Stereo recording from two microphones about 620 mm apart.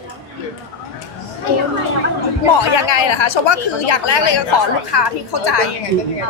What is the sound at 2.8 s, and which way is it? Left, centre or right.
Speech, left.